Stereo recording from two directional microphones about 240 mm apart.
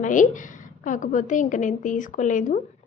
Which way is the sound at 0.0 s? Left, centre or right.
Left.